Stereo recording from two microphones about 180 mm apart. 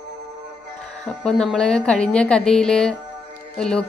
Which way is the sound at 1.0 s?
5° left (ahead or behind).